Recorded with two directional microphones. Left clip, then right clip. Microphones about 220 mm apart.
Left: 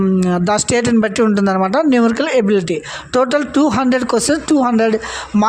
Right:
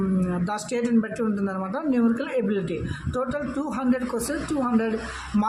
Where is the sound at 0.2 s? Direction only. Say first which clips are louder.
Left 13 dB; 40° left (ahead or behind).